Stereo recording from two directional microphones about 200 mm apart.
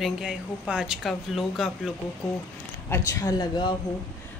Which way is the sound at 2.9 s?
15° left (ahead or behind).